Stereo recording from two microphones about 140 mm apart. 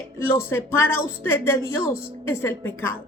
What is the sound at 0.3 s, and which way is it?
A woman's voice, 15° left (ahead or behind).